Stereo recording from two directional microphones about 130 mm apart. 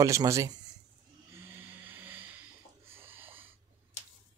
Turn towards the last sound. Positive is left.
turn(degrees=-15)  # may be behind; listen again after turning